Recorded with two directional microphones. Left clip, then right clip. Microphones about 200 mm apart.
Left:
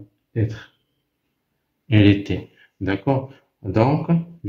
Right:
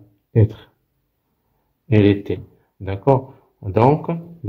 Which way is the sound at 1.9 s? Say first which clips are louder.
Right 1 dB; 25° right (ahead or behind).